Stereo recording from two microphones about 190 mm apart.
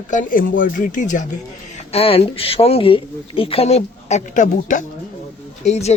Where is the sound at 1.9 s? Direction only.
30° left (ahead or behind).